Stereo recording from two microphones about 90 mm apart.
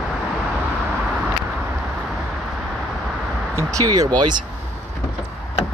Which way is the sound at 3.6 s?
40° right (ahead or behind).